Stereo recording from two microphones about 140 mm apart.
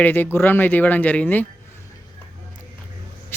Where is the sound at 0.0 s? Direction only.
15° left (ahead or behind).